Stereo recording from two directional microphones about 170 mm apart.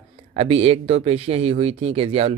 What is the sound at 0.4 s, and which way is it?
Speech, 35° right (ahead or behind).